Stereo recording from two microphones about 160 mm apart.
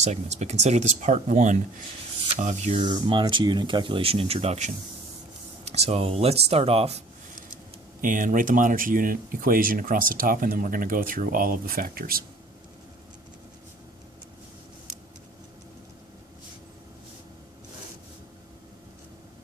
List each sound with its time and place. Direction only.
0.0 s speech: 45° right (ahead or behind)
3.1 s speech: 30° right (ahead or behind)
8.0 s speech: 55° right (ahead or behind)